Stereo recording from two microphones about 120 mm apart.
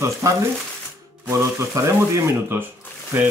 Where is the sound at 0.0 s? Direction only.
25° right (ahead or behind).